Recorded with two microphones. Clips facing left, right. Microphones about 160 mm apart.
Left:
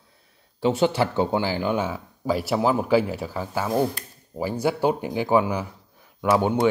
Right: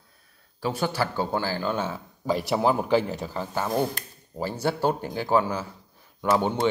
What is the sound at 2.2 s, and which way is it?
Speech, 5° left (ahead or behind).